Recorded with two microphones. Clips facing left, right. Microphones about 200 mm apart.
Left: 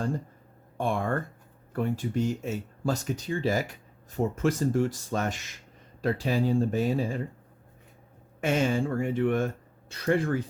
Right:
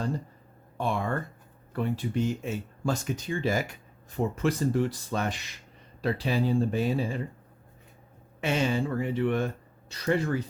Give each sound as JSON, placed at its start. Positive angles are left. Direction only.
{"t": 0.8, "sound": "speech", "side_deg": 50}
{"t": 8.4, "sound": "speech", "side_deg": 50}